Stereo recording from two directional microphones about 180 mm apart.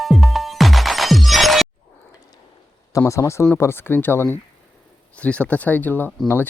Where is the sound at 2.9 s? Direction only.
15° left (ahead or behind).